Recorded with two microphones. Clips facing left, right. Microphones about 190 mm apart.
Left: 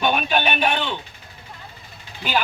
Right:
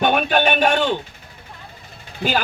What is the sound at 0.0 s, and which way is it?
Speech, 55° right (ahead or behind).